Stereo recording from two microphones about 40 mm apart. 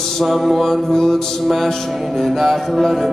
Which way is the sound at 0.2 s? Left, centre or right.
Centre.